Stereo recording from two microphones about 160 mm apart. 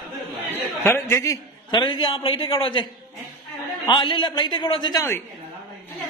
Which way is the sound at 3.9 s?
30° left (ahead or behind).